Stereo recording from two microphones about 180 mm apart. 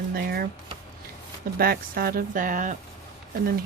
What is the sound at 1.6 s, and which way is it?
Speech, 55° right (ahead or behind).